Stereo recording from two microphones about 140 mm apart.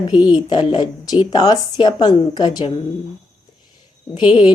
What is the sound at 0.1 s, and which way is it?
Speech, 30° left (ahead or behind).